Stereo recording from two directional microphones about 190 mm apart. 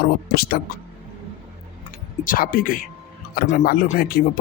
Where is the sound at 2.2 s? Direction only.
50° left (ahead or behind).